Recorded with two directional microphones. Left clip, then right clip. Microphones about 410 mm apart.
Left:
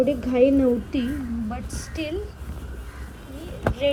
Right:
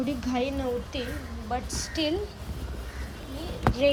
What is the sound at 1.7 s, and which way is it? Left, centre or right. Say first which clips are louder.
Speech: right 2 dB; centre.